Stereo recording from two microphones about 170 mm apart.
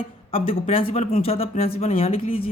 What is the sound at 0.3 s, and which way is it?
Speech, 35° left (ahead or behind).